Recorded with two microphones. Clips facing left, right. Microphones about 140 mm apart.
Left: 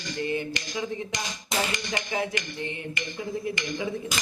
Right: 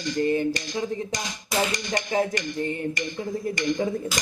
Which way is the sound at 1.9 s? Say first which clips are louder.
Right 5 dB; 40° right (ahead or behind).